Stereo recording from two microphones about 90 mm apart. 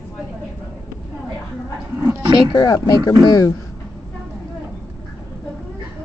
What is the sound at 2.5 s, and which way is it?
Speech, 45° left (ahead or behind).